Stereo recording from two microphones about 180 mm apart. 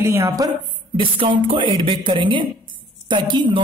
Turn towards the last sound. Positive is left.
turn(degrees=-25)  # may be behind; listen again after turning